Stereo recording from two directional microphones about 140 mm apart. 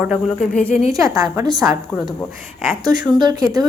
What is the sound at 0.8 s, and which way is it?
Speech, 25° right (ahead or behind).